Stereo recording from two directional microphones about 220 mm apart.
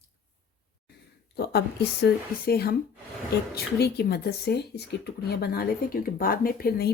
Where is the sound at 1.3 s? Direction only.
45° left (ahead or behind).